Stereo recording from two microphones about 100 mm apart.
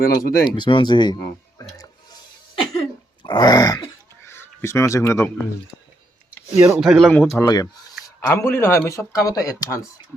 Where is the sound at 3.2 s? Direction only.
45° left (ahead or behind).